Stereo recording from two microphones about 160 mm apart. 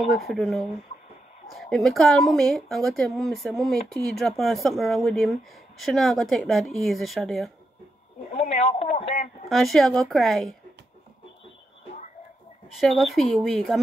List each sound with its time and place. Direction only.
0.3 s speech: centre (ahead or behind)
8.3 s speech: 45° left (ahead or behind)
9.5 s speech: centre (ahead or behind)
12.7 s speech: centre (ahead or behind)